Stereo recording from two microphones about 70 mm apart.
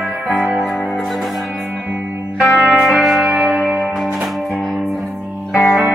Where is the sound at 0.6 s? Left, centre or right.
Centre.